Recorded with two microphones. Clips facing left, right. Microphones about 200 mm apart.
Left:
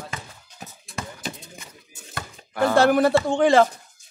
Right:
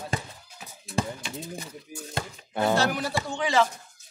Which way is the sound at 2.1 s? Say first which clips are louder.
Left 3 dB; 25° right (ahead or behind).